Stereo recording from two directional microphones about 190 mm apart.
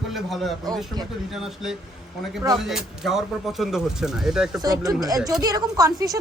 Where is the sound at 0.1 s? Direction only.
Centre (ahead or behind).